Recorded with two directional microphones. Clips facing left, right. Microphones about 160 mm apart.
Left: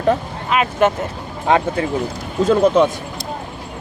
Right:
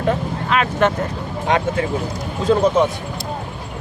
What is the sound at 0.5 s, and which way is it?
Speech, 10° left (ahead or behind).